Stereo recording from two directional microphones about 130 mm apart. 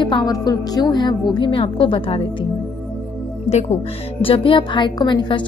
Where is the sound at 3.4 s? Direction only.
55° left (ahead or behind).